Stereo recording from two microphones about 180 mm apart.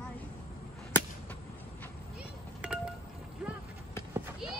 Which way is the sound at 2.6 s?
5° right (ahead or behind).